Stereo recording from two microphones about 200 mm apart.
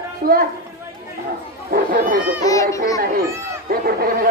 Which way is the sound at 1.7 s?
45° right (ahead or behind).